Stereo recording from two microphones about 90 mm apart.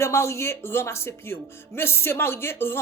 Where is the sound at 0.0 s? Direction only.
30° left (ahead or behind).